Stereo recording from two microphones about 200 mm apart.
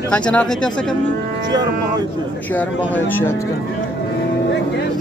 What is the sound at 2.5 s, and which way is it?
Speech, 10° left (ahead or behind).